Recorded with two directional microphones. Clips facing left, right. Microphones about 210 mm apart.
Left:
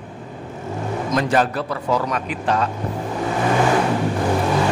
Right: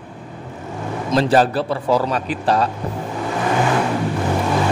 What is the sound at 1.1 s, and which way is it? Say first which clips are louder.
Speech: right 4 dB; 30° right (ahead or behind).